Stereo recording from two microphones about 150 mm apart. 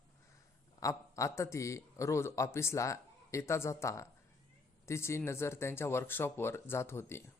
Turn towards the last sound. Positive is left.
turn(degrees=15)  # may be behind; listen again after turning